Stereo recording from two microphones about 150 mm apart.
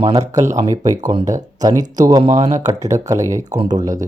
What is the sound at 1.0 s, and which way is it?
Speech, 25° right (ahead or behind).